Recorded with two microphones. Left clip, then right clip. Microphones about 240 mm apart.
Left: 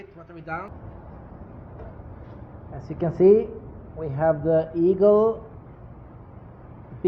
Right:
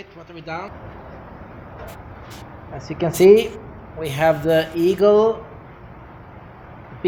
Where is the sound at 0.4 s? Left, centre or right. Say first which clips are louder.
Right 3 dB; right.